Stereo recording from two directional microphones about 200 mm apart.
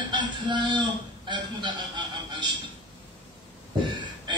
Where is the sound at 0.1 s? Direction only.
25° right (ahead or behind).